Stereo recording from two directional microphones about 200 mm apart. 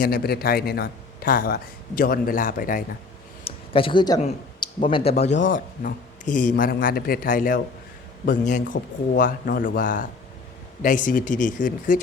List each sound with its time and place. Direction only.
0.0 s a man's voice: 50° left (ahead or behind)
3.4 s a sound: 25° left (ahead or behind)
4.6 s speech: 25° left (ahead or behind)
5.3 s speech: 70° left (ahead or behind)
5.5 s a man's voice: 40° left (ahead or behind)